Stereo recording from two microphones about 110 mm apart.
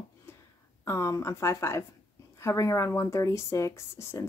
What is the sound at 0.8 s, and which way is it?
Speech, 25° left (ahead or behind).